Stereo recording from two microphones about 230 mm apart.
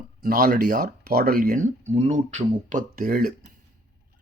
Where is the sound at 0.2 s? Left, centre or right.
Right.